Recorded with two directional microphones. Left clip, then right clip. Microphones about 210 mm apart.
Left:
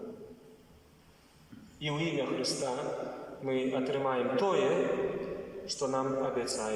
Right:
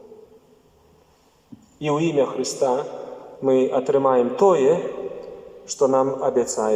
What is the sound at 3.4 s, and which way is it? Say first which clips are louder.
A man's voice: right 13 dB; 45° right (ahead or behind).